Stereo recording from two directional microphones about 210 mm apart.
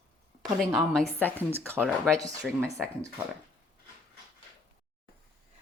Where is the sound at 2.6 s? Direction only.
15° right (ahead or behind).